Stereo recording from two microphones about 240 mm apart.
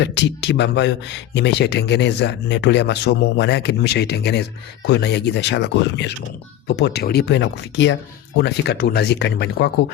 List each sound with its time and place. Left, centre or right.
0.0 s speech: left